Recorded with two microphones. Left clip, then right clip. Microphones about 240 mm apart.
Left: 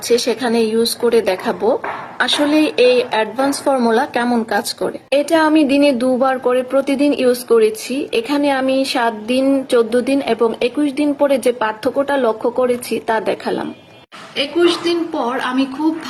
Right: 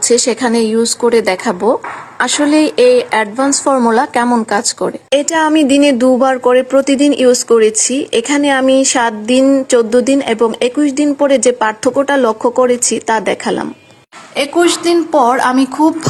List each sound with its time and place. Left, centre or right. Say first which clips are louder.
0.3 s speech: right 3 dB; right
14.6 s speech: right 4 dB; right